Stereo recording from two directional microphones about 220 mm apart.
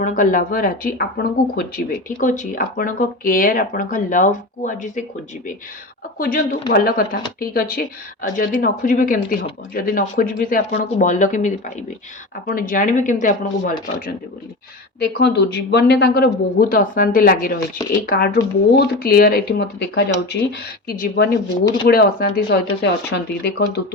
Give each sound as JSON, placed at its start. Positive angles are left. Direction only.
{"t": 0.0, "sound": "speech", "side_deg": 35}
{"t": 6.1, "sound": "speech", "side_deg": 40}
{"t": 14.9, "sound": "a man's voice", "side_deg": 50}